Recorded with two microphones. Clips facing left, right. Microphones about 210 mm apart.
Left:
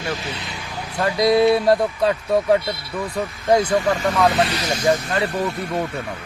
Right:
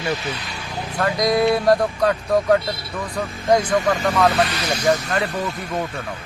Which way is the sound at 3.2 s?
25° left (ahead or behind).